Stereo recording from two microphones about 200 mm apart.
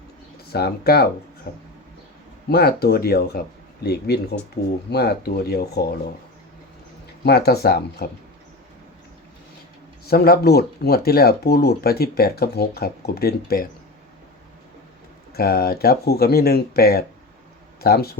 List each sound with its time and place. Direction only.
0.5 s speech: 50° left (ahead or behind)
7.3 s speech: 55° left (ahead or behind)
10.1 s speech: 50° left (ahead or behind)
15.3 s speech: 50° left (ahead or behind)